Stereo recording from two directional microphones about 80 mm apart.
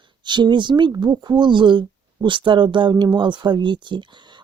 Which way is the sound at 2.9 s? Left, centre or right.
Right.